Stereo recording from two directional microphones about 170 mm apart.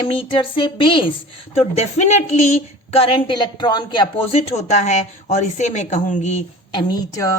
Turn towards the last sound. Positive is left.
turn(degrees=20)  # may be behind; listen again after turning